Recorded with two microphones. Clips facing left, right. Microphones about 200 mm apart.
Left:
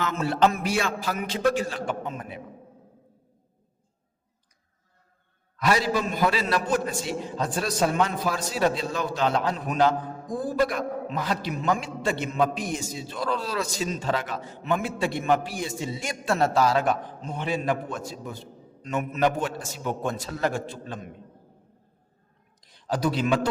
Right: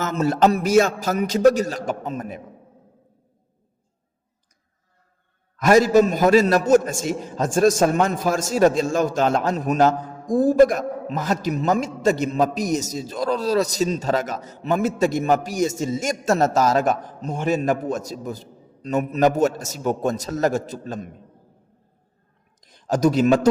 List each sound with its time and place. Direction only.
0.0 s a man's voice: 40° right (ahead or behind)
5.5 s a man's voice: 45° right (ahead or behind)
22.6 s a man's voice: 45° right (ahead or behind)